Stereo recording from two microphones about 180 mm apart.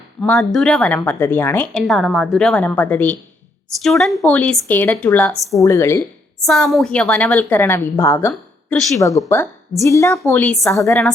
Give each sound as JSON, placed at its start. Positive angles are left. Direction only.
{"t": 0.2, "sound": "a woman's voice", "side_deg": 0}
{"t": 5.6, "sound": "a woman's voice", "side_deg": 15}
{"t": 6.4, "sound": "a woman's voice", "side_deg": 0}
{"t": 8.3, "sound": "a sound", "side_deg": 5}
{"t": 9.0, "sound": "a woman's voice", "side_deg": 20}
{"t": 10.7, "sound": "a woman's voice", "side_deg": 15}